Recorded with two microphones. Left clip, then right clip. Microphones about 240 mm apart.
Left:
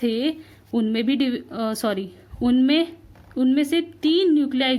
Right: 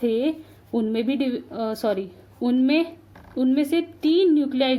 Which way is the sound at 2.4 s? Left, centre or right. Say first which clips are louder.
Left 1 dB; left.